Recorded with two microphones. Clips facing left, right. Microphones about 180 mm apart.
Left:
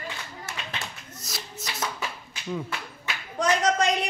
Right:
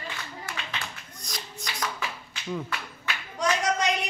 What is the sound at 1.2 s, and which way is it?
Shuffle, 5° left (ahead or behind).